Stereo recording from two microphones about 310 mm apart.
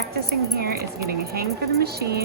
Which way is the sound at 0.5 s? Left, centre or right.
Right.